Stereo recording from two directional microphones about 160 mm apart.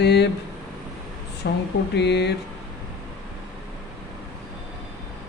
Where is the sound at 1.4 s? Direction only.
90° left.